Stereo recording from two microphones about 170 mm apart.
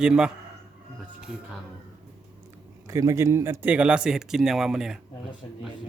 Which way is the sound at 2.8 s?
20° right (ahead or behind).